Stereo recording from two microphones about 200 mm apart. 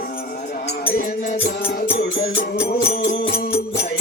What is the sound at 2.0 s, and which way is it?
Music, 50° left (ahead or behind).